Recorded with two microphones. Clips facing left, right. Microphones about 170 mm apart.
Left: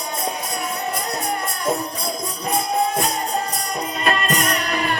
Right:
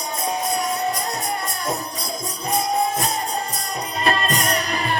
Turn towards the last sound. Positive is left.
turn(degrees=-30)  # may be behind; listen again after turning